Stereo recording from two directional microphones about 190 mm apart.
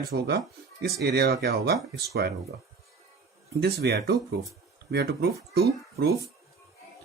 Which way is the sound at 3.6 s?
60° right (ahead or behind).